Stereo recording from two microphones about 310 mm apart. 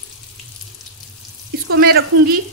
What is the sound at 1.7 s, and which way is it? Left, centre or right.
Frying, right.